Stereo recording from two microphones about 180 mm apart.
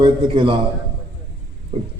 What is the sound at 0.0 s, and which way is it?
Speech, 30° right (ahead or behind).